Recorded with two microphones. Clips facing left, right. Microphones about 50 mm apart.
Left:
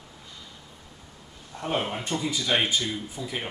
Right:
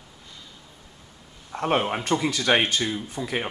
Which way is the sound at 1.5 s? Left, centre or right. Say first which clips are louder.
Right 5 dB; right.